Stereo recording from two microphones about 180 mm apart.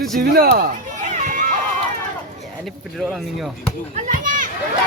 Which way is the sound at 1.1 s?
45° right (ahead or behind).